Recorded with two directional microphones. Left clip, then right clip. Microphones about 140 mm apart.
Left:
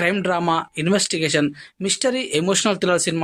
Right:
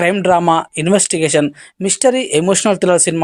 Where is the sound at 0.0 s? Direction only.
30° right (ahead or behind).